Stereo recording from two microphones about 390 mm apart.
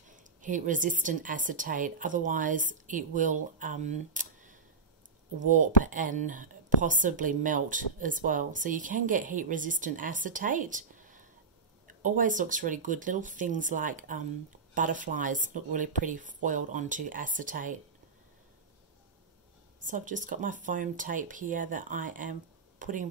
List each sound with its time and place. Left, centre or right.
0.1 s speech: centre
19.8 s speech: centre